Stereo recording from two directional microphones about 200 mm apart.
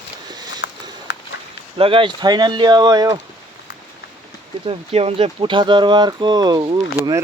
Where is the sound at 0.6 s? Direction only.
60° left (ahead or behind).